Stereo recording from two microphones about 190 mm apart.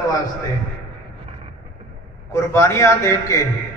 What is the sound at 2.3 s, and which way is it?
A man's voice, 15° left (ahead or behind).